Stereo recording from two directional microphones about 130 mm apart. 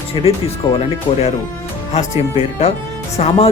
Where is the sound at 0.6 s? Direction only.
35° left (ahead or behind).